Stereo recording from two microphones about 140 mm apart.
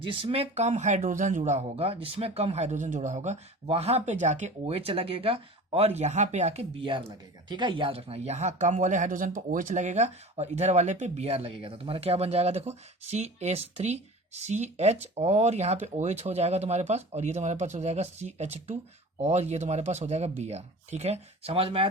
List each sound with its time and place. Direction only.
0.0 s speech: 40° right (ahead or behind)